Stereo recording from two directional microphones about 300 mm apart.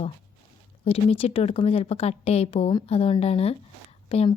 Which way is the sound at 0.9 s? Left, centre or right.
Centre.